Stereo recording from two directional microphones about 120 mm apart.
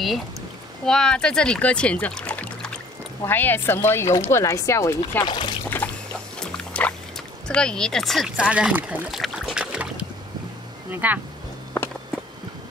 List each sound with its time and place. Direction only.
0.8 s speech: 5° left (ahead or behind); by 5.2 s 20° left (ahead or behind)
5.2 s speech: 40° left (ahead or behind)
5.8 s boat: 10° left (ahead or behind)
6.4 s music: 10° left (ahead or behind)
7.4 s speech: 5° left (ahead or behind)
8.4 s speech: 10° right (ahead or behind)
9.2 s boat: 5° right (ahead or behind)
10.9 s speech: 15° right (ahead or behind)